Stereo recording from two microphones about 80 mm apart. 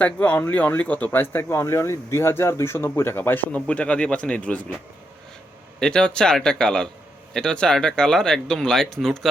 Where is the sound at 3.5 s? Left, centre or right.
Centre.